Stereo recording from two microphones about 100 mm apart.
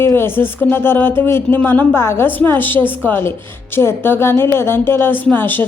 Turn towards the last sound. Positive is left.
turn(degrees=20)  # may be behind; listen again after turning